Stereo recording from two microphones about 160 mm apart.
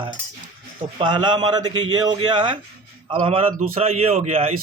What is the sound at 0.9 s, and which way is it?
Speech, 30° right (ahead or behind).